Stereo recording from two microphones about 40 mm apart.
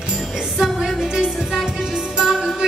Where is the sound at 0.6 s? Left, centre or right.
Centre.